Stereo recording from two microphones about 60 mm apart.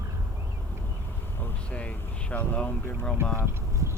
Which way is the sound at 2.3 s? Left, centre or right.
Left.